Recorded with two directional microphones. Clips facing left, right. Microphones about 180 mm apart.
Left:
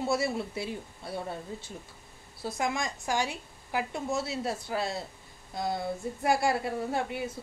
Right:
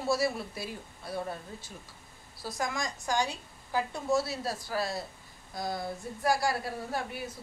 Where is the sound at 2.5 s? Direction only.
25° left (ahead or behind).